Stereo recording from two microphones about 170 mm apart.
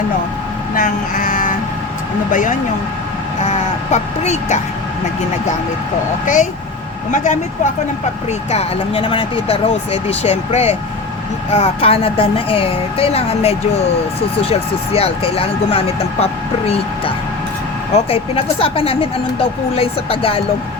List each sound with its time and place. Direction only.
0.8 s a woman's voice: 55° left (ahead or behind)
3.9 s a woman's voice: 40° left (ahead or behind)
6.2 s a woman's voice: 50° left (ahead or behind)
17.9 s a woman's voice: 35° left (ahead or behind)